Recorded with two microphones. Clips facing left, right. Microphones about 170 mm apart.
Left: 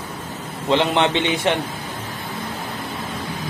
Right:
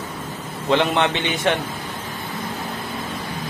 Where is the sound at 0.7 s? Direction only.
25° left (ahead or behind).